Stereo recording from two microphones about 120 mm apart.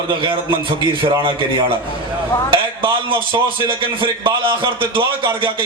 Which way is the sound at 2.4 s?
45° right (ahead or behind).